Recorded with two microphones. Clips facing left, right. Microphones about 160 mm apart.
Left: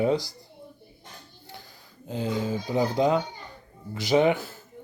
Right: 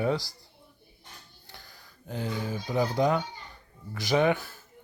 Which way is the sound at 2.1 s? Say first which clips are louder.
Left 5 dB; 20° left (ahead or behind).